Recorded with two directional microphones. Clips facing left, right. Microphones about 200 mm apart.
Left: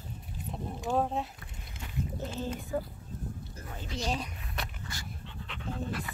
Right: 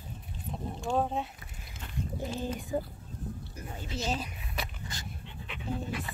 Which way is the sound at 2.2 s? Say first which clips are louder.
Right 4 dB; 15° right (ahead or behind).